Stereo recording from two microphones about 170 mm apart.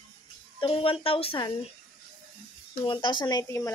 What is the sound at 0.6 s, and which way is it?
Speech, 30° left (ahead or behind).